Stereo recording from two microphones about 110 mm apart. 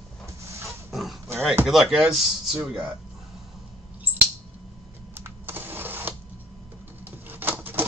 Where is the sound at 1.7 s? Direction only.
5° right (ahead or behind).